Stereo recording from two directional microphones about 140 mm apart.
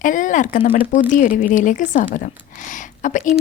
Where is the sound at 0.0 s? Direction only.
70° left (ahead or behind).